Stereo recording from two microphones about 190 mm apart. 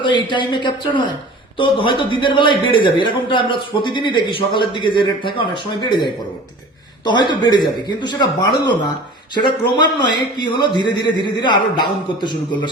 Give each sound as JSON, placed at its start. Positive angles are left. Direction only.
{"t": 0.0, "sound": "a man's voice", "side_deg": 25}
{"t": 7.0, "sound": "a man's voice", "side_deg": 25}